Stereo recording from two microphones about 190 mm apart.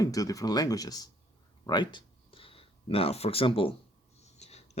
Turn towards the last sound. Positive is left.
turn(degrees=35)  # may be behind; listen again after turning